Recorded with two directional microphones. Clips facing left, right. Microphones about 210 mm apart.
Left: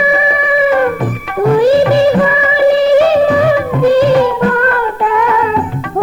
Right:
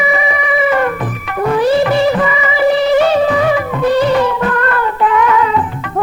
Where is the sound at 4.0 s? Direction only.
30° left (ahead or behind).